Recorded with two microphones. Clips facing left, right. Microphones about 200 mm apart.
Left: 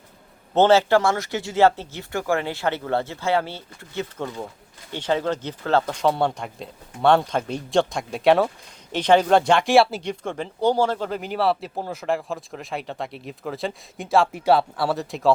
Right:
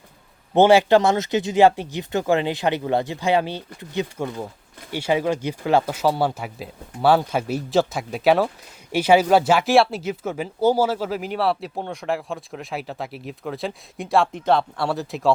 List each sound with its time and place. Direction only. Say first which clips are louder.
0.5 s speech: right 2 dB; 15° right (ahead or behind)